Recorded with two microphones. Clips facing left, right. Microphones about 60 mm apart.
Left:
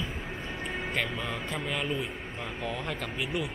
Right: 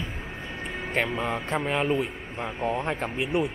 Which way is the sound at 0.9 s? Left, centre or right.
Right.